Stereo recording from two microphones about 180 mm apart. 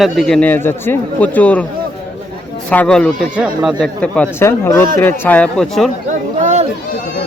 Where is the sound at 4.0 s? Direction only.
5° left (ahead or behind).